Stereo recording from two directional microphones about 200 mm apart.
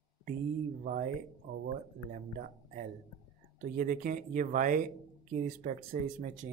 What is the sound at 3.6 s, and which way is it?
Speech, 40° right (ahead or behind).